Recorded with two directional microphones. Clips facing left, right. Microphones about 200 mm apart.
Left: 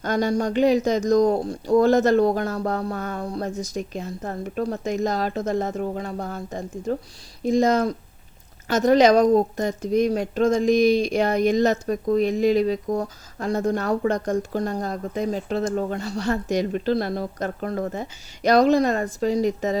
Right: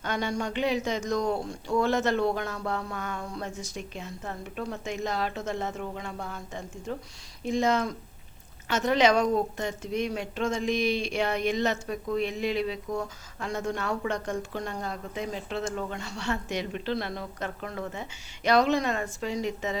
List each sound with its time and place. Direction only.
0.0 s a woman's voice: 40° left (ahead or behind)